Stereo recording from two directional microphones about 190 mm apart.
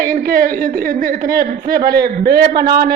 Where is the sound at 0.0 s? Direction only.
50° right (ahead or behind).